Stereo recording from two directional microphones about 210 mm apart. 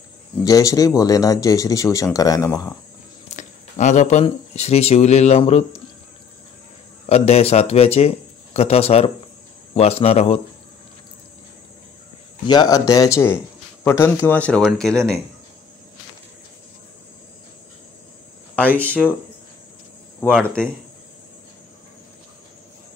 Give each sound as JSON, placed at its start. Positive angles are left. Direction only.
{"t": 0.4, "sound": "speech", "side_deg": 15}
{"t": 3.3, "sound": "speech", "side_deg": 35}
{"t": 7.1, "sound": "speech", "side_deg": 30}
{"t": 12.4, "sound": "speech", "side_deg": 20}
{"t": 18.8, "sound": "speech", "side_deg": 5}
{"t": 20.3, "sound": "speech", "side_deg": 5}